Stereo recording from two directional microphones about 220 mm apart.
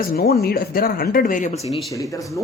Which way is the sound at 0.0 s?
45° left (ahead or behind).